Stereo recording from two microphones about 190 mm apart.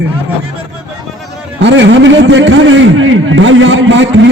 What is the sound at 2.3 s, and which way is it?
A man's voice, 80° right.